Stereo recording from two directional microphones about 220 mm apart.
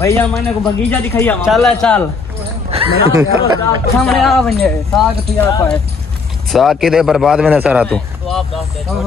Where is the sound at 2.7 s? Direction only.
30° right (ahead or behind).